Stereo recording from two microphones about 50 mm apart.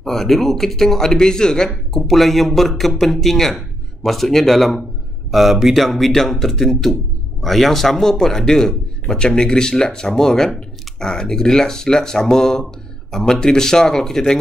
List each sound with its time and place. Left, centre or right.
0.0 s speech: centre
1.7 s speech: centre